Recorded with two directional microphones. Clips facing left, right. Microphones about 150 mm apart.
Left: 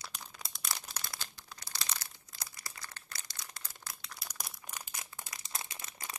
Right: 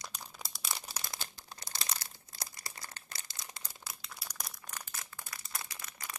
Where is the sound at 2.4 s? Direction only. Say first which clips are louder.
Right 2 dB; 25° right (ahead or behind).